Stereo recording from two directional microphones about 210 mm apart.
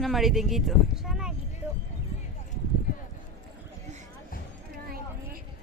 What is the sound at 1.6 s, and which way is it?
Clip-clop, 10° right (ahead or behind).